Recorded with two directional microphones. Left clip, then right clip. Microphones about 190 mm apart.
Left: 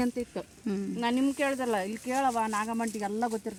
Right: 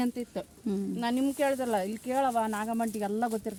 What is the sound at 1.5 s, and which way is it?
Speech, 65° right (ahead or behind).